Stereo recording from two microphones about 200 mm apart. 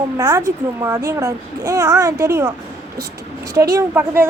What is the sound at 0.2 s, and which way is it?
Speech, 15° right (ahead or behind).